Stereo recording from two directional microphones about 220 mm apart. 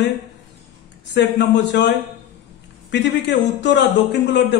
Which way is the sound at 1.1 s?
50° left (ahead or behind).